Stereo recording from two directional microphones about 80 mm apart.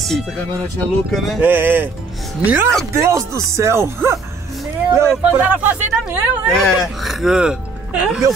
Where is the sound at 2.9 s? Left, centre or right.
Right.